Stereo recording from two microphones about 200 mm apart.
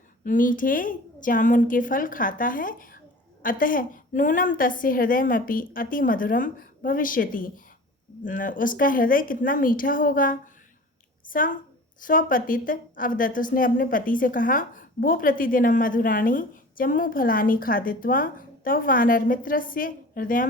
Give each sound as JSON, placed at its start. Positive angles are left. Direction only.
{"t": 0.3, "sound": "a woman's voice", "side_deg": 40}